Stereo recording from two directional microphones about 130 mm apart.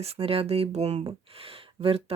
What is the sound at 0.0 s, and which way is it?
Speech, 50° right (ahead or behind).